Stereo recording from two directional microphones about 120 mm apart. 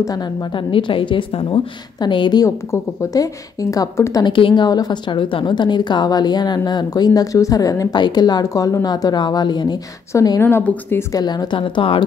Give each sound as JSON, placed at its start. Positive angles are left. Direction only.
{"t": 0.6, "sound": "a woman's voice", "side_deg": 45}
{"t": 2.4, "sound": "speech", "side_deg": 25}
{"t": 4.2, "sound": "a woman's voice", "side_deg": 45}
{"t": 10.4, "sound": "speech", "side_deg": 15}
{"t": 11.1, "sound": "a woman's voice", "side_deg": 35}